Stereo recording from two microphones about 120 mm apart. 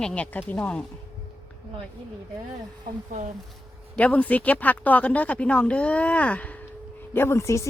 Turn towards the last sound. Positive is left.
turn(degrees=25)  # may be behind; listen again after turning